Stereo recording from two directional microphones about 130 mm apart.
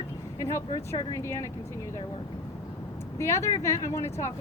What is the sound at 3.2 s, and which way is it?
Speech, 20° left (ahead or behind).